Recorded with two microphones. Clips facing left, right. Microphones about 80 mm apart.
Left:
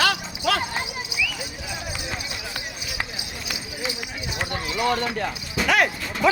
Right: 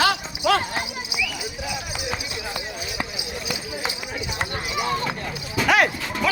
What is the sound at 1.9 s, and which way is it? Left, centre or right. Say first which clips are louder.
Clip-clop: right 3 dB; centre.